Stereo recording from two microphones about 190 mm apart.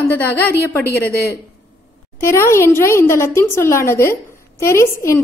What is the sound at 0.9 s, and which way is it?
Speech, 55° left (ahead or behind).